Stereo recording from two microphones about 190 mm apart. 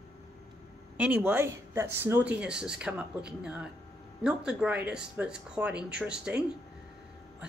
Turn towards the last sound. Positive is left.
turn(degrees=-5)  # may be behind; listen again after turning